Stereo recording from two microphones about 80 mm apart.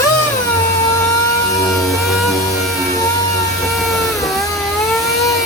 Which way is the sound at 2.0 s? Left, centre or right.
Centre.